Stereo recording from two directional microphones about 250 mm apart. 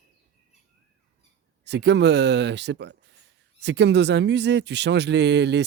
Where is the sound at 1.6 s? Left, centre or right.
Right.